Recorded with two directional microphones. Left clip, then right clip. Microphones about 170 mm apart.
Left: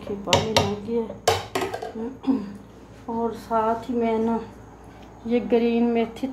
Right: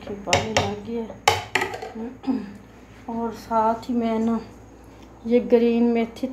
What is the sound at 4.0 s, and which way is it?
Speech, 35° right (ahead or behind).